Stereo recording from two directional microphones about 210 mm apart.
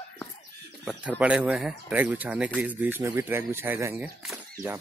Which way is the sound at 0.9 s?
5° right (ahead or behind).